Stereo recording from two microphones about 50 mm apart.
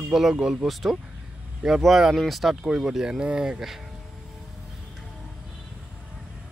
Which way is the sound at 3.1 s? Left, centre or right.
Centre.